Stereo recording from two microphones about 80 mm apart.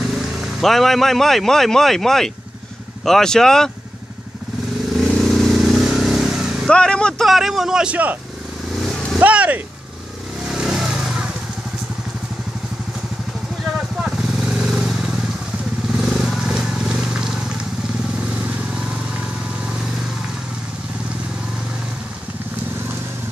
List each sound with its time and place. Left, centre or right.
0.1 s a man's voice: centre
5.1 s vehicle: centre
6.7 s vehicle: centre
7.2 s a man's voice: centre
8.7 s vehicle: centre
9.2 s speech: centre
10.5 s vehicle: centre
13.7 s vehicle: centre